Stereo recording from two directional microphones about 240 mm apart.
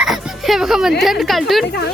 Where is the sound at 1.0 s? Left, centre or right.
Centre.